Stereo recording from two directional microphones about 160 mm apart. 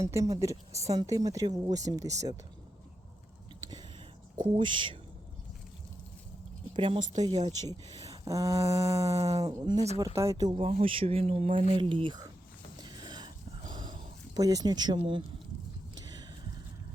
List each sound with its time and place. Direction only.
0.0 s speech: 20° right (ahead or behind)
0.7 s speech: 45° right (ahead or behind)
0.9 s speech: 20° right (ahead or behind)
3.6 s a sound: 25° right (ahead or behind)
4.4 s speech: 30° right (ahead or behind)
6.7 s speech: 30° right (ahead or behind)
7.0 s speech: 50° right (ahead or behind)
7.7 s speech: 25° right (ahead or behind)
9.1 s speech: 40° right (ahead or behind)
9.4 s speech: 25° right (ahead or behind)
9.7 s speech: 45° right (ahead or behind)
10.2 s speech: 20° right (ahead or behind)
12.8 s a sound: 25° right (ahead or behind)